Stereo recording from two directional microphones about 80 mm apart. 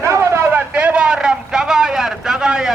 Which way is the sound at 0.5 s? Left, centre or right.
Centre.